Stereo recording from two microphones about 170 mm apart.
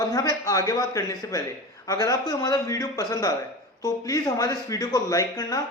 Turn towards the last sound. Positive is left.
turn(degrees=20)  # may be behind; listen again after turning